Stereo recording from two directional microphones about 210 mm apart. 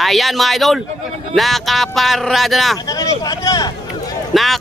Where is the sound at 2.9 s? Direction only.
15° left (ahead or behind).